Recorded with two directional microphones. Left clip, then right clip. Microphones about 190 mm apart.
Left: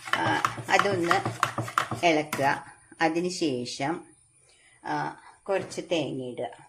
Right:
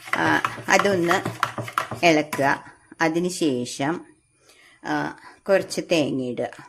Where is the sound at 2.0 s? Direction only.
40° right (ahead or behind).